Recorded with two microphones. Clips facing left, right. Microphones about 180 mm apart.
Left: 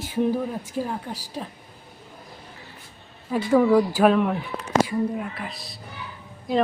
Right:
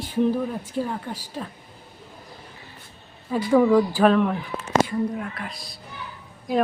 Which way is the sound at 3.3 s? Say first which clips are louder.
Even; 5° left (ahead or behind).